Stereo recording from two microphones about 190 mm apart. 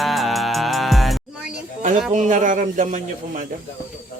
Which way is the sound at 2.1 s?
40° right (ahead or behind).